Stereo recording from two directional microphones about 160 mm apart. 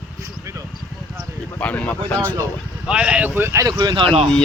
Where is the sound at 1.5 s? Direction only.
10° left (ahead or behind).